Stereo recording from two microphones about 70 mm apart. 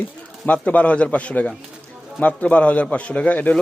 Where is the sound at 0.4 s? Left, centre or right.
Centre.